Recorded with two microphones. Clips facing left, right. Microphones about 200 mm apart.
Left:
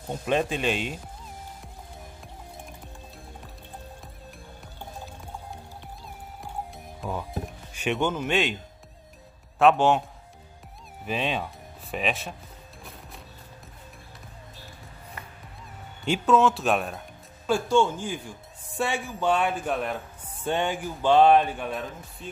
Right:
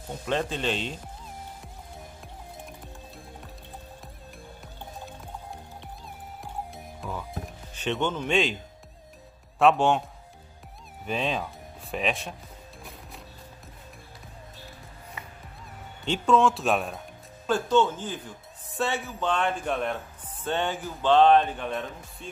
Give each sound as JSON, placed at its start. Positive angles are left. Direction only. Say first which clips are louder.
{"t": 0.3, "sound": "speech", "louder": "left 3 dB", "side_deg": 15}
{"t": 6.4, "sound": "music", "louder": "left 1 dB", "side_deg": 0}
{"t": 7.7, "sound": "speech", "louder": "left 2 dB", "side_deg": 10}
{"t": 9.6, "sound": "speech", "louder": "left 1 dB", "side_deg": 0}
{"t": 11.1, "sound": "speech", "louder": "even", "side_deg": 0}
{"t": 16.1, "sound": "speech", "louder": "left 1 dB", "side_deg": 0}
{"t": 17.5, "sound": "speech", "louder": "left 1 dB", "side_deg": 10}
{"t": 20.4, "sound": "speech", "louder": "left 2 dB", "side_deg": 15}